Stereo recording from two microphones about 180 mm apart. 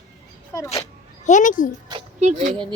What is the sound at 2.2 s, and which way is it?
Speech, 40° right (ahead or behind).